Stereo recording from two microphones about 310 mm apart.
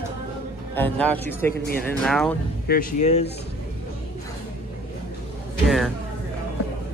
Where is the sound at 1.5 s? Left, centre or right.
Left.